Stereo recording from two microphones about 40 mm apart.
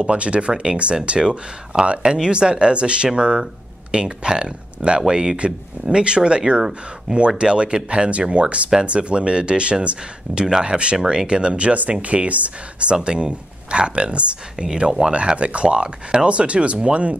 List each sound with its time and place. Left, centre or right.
0.0 s speech: right
14.7 s speech: centre
15.1 s speech: right